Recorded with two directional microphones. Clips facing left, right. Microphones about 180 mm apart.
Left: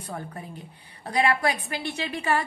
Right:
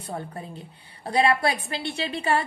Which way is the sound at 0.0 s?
30° right (ahead or behind).